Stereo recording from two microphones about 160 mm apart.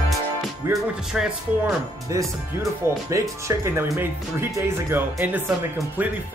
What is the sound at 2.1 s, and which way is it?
Speech, 20° right (ahead or behind).